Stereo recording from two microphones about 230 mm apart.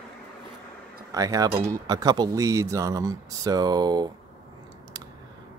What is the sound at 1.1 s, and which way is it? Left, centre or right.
Speech, centre.